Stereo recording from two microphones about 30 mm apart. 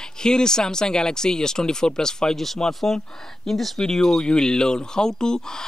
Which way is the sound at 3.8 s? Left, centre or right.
Centre.